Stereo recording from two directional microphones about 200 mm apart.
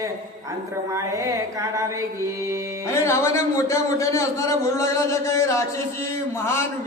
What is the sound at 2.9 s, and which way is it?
A man's voice, 15° left (ahead or behind).